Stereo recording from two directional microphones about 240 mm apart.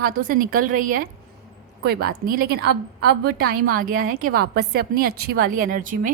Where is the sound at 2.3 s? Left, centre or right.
Right.